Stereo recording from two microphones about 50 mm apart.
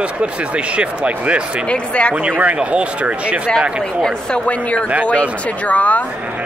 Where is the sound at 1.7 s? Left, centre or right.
Left.